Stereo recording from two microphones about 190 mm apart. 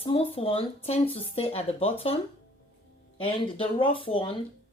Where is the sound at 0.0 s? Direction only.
30° left (ahead or behind).